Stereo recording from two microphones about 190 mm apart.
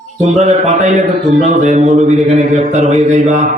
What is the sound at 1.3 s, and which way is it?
A man's voice, 35° right (ahead or behind).